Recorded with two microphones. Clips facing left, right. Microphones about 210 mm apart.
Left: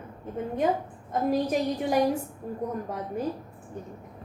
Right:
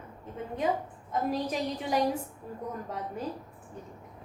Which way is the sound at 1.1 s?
50° left (ahead or behind).